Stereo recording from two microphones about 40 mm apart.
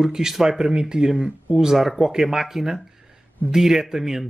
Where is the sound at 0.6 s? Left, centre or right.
Right.